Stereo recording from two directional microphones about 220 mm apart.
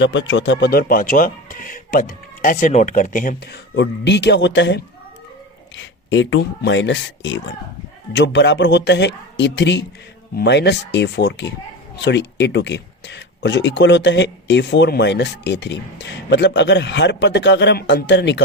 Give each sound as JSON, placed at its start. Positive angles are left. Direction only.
{"t": 0.0, "sound": "a man's voice", "side_deg": 55}